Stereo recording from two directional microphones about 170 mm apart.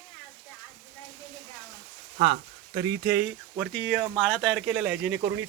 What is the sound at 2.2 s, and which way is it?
Speech, 30° right (ahead or behind).